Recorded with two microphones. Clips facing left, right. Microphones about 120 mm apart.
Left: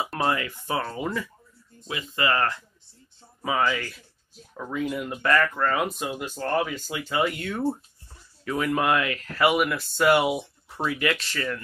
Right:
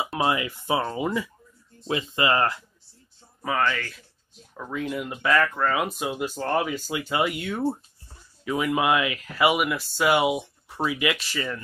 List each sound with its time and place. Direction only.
0.0 s speech: 5° right (ahead or behind)
1.9 s speech: 25° right (ahead or behind)
3.4 s speech: 5° left (ahead or behind)
6.0 s speech: 15° right (ahead or behind)